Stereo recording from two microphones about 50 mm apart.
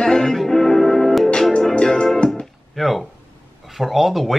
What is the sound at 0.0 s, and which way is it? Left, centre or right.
Music, centre.